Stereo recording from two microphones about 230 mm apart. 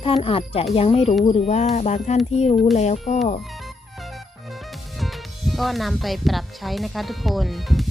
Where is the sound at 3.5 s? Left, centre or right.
Centre.